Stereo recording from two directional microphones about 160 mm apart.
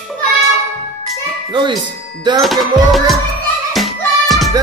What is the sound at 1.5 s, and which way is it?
Speech, 30° right (ahead or behind).